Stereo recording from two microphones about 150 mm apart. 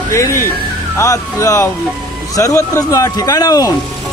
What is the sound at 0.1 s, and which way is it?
Speech, 20° left (ahead or behind).